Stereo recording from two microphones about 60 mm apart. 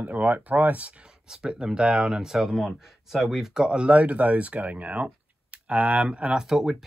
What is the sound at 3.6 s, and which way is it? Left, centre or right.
Speech, centre.